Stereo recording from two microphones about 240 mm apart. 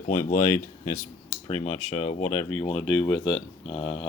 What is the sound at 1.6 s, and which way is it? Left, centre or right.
Speech, left.